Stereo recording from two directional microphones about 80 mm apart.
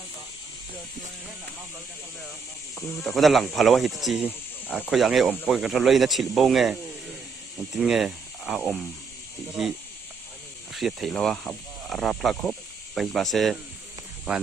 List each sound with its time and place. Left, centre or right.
2.7 s speech: centre
4.6 s speech: centre
4.9 s speech: centre
7.8 s speech: centre
14.3 s speech: centre